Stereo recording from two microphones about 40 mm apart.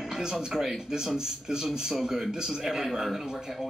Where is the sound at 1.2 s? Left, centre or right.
Centre.